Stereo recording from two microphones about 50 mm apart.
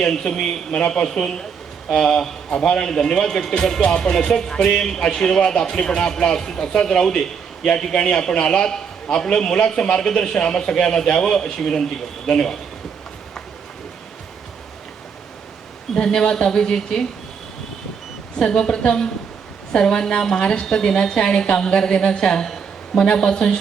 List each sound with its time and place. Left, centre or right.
0.0 s speech: centre
16.0 s speech: centre
18.3 s speech: centre